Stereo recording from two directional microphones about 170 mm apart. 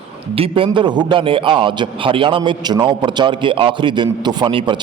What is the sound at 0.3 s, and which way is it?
A man's voice, 35° right (ahead or behind).